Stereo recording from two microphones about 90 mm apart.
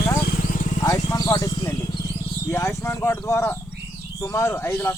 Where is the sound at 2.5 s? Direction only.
35° left (ahead or behind).